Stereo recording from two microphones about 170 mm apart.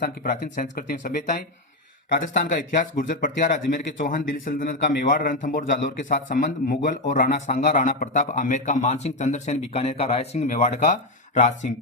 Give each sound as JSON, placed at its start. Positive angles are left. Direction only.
{"t": 0.0, "sound": "speech", "side_deg": 55}
{"t": 2.7, "sound": "a man's voice", "side_deg": 50}
{"t": 4.8, "sound": "a man's voice", "side_deg": 75}
{"t": 5.0, "sound": "a man's voice", "side_deg": 50}